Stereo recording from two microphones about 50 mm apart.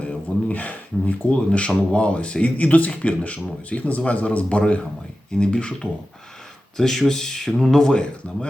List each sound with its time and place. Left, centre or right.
0.0 s a sound: left
1.5 s speech: left
6.7 s speech: centre